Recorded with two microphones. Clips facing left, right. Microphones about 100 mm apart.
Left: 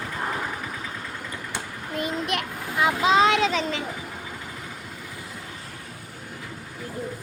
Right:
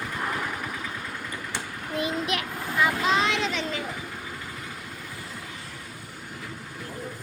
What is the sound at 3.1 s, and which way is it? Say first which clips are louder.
Child singing: left 6 dB; 35° left (ahead or behind).